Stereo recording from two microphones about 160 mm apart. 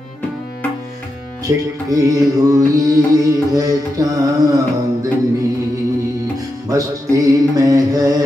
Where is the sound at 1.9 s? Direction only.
20° right (ahead or behind).